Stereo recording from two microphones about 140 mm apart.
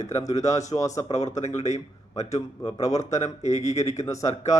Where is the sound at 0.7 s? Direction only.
25° left (ahead or behind).